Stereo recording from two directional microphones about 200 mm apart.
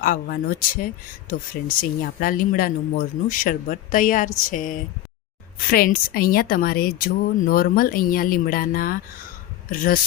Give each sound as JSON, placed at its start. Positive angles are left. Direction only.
{"t": 0.0, "sound": "a woman's voice", "side_deg": 45}